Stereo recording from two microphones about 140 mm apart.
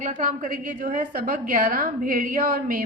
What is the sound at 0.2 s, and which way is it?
A woman's voice, 65° right (ahead or behind).